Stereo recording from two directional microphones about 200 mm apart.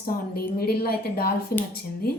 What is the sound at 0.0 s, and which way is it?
A woman's voice, 50° left (ahead or behind).